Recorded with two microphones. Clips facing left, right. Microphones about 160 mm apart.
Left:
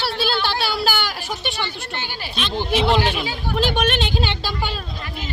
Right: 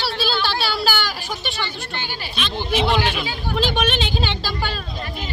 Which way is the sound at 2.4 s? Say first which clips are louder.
Left 1 dB; 15° left (ahead or behind).